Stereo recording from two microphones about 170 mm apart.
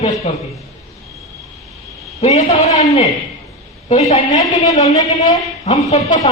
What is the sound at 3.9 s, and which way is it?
Speech, 40° left (ahead or behind).